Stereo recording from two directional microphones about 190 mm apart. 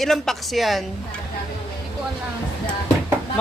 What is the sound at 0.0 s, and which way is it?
Speech, centre (ahead or behind).